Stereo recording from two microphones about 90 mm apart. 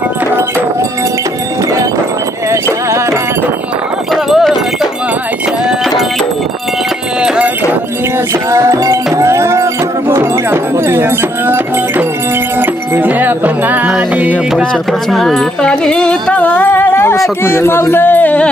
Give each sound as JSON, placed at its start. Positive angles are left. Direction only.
{"t": 2.5, "sound": "music", "side_deg": -35}
{"t": 4.1, "sound": "clip-clop", "side_deg": 0}
{"t": 7.2, "sound": "clip-clop", "side_deg": -10}
{"t": 8.5, "sound": "music", "side_deg": -35}
{"t": 14.6, "sound": "music", "side_deg": 5}
{"t": 17.4, "sound": "speech", "side_deg": 30}